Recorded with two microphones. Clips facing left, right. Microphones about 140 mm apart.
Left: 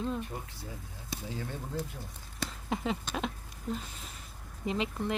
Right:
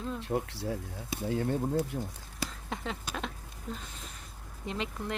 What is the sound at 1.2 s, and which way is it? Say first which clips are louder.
Speech: right 11 dB; 60° right (ahead or behind).